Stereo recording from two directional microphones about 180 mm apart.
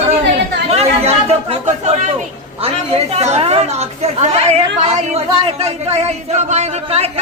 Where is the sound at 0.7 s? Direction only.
35° right (ahead or behind).